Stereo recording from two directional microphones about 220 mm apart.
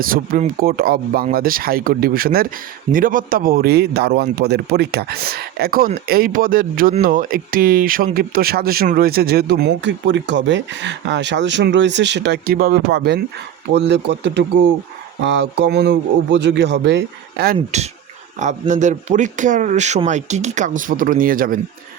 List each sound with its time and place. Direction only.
0.0 s a man's voice: 40° right (ahead or behind)
18.3 s speech: 35° right (ahead or behind)